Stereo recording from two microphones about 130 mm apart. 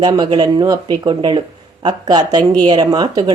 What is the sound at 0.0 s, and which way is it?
Speech, 35° right (ahead or behind).